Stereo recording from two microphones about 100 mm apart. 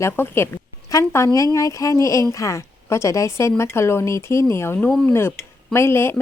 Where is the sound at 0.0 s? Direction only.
25° left (ahead or behind).